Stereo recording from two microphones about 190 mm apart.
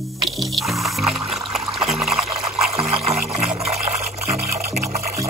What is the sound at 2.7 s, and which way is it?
Music, 35° right (ahead or behind).